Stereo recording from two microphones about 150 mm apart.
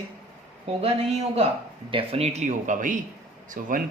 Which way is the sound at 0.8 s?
45° right (ahead or behind).